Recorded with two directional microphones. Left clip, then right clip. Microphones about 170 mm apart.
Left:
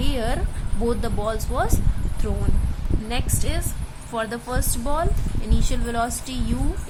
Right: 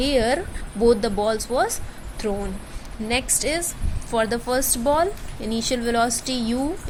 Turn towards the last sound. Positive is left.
turn(degrees=-15)  # may be behind; listen again after turning